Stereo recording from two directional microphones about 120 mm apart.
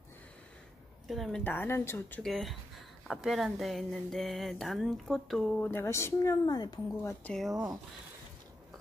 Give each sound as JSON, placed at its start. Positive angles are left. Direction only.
{"t": 1.0, "sound": "a woman's voice", "side_deg": 0}
{"t": 1.4, "sound": "speech", "side_deg": 15}
{"t": 2.2, "sound": "speech", "side_deg": 0}
{"t": 5.6, "sound": "speech", "side_deg": 20}
{"t": 7.0, "sound": "speech", "side_deg": 20}
{"t": 7.3, "sound": "speech", "side_deg": -5}